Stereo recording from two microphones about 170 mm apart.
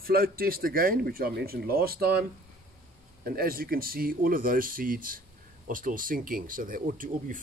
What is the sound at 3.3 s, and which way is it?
Speech, 60° right (ahead or behind).